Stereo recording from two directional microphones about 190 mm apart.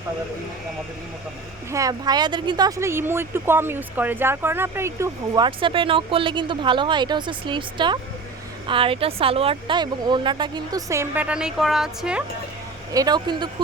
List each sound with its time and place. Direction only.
1.7 s speech: 20° right (ahead or behind); by 12.2 s 5° right (ahead or behind)
12.9 s speech: 20° right (ahead or behind)